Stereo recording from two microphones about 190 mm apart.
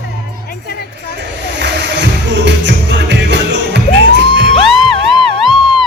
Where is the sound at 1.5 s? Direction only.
65° right (ahead or behind).